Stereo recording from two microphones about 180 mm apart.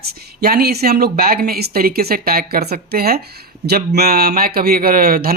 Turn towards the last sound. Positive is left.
turn(degrees=-55)  # may be behind; listen again after turning